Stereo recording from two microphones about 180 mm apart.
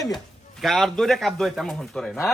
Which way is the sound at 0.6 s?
Centre (ahead or behind).